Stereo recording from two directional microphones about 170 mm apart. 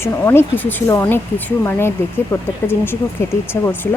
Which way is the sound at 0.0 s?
15° left (ahead or behind).